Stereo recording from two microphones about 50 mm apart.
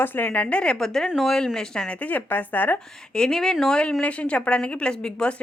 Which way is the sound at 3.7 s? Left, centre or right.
Left.